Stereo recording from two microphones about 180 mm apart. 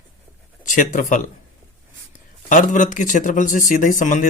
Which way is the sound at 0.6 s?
45° left (ahead or behind).